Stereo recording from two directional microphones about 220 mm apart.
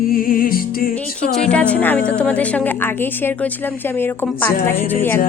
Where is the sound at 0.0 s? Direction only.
40° left (ahead or behind).